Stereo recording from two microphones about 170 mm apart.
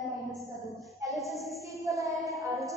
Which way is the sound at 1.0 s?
Centre (ahead or behind).